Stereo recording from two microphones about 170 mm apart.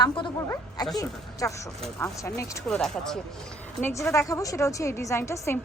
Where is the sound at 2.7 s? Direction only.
5° left (ahead or behind).